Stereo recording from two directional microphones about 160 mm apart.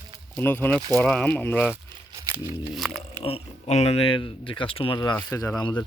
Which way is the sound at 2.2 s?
25° right (ahead or behind).